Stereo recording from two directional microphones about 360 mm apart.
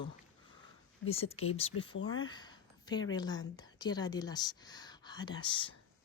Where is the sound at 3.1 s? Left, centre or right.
Centre.